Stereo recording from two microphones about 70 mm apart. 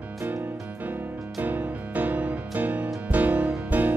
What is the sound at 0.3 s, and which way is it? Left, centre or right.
Music, right.